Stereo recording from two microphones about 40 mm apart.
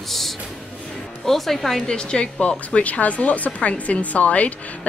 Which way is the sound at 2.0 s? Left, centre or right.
Left.